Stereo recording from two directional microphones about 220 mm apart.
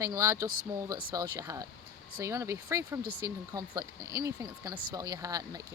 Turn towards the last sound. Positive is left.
turn(degrees=-15)  # may be behind; listen again after turning